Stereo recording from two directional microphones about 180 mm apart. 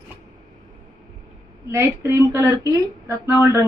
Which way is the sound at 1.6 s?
15° right (ahead or behind).